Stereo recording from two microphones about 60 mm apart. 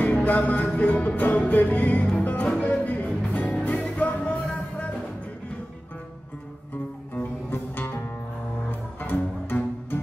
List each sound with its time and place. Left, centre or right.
0.0 s music: left
7.5 s music: left